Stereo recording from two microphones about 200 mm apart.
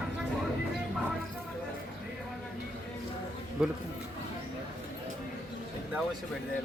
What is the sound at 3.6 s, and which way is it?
Speech, 5° right (ahead or behind).